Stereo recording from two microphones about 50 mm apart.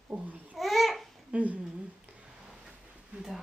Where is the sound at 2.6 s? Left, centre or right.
Centre.